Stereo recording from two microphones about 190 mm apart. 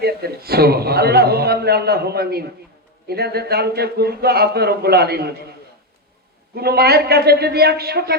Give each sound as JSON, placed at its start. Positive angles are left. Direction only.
{"t": 0.0, "sound": "a man's voice", "side_deg": -55}
{"t": 6.5, "sound": "a man's voice", "side_deg": -55}